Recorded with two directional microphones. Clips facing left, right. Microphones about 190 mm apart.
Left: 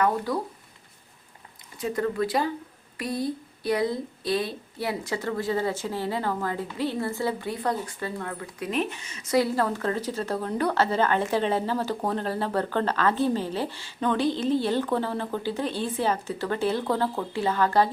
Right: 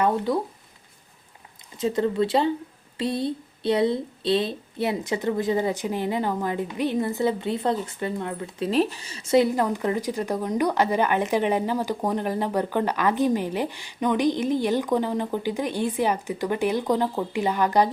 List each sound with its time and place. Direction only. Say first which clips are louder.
0.3 s speech: right 4 dB; 25° right (ahead or behind)
1.8 s speech: right 4 dB; 25° right (ahead or behind)